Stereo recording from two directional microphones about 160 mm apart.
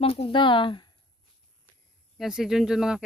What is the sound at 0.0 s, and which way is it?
Speech, 35° left (ahead or behind).